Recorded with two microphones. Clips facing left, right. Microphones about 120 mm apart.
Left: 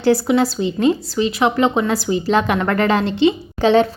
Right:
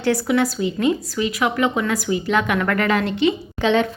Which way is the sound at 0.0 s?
30° left (ahead or behind).